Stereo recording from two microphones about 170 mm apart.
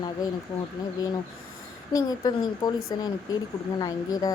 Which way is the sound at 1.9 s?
20° left (ahead or behind).